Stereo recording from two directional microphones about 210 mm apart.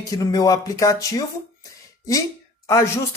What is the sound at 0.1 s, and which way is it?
Speech, 15° left (ahead or behind).